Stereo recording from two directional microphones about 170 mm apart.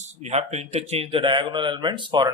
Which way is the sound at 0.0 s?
40° right (ahead or behind).